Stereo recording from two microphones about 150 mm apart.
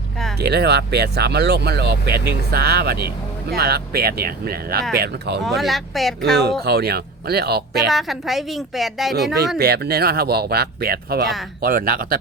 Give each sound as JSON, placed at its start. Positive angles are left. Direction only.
{"t": 0.3, "sound": "speech", "side_deg": -90}
{"t": 5.4, "sound": "a woman's voice", "side_deg": 0}
{"t": 6.7, "sound": "speech", "side_deg": -90}
{"t": 7.9, "sound": "a woman's voice", "side_deg": 0}
{"t": 9.6, "sound": "speech", "side_deg": -90}
{"t": 11.6, "sound": "speech", "side_deg": -75}